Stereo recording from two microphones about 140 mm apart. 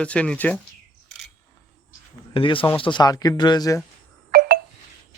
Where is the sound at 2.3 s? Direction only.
40° left (ahead or behind).